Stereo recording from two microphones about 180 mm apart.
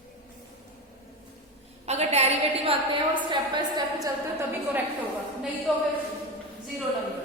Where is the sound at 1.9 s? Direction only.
35° right (ahead or behind).